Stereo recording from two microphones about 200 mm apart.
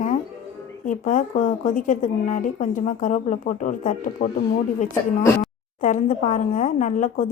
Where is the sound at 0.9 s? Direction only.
40° left (ahead or behind).